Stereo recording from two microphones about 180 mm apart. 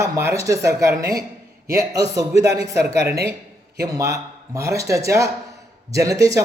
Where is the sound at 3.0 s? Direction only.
60° right (ahead or behind).